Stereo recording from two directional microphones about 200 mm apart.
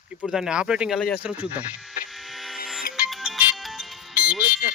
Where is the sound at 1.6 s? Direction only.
5° right (ahead or behind).